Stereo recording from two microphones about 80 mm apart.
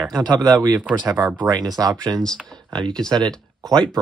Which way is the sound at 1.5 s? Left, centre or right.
Right.